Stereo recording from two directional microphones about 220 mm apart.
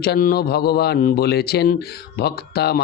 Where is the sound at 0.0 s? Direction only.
45° left (ahead or behind).